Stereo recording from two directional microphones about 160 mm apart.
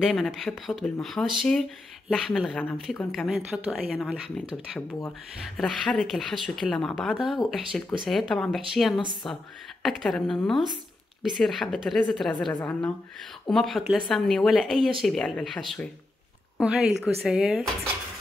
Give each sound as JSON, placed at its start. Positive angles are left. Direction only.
{"t": 0.0, "sound": "speech", "side_deg": 0}
{"t": 5.6, "sound": "a woman's voice", "side_deg": 0}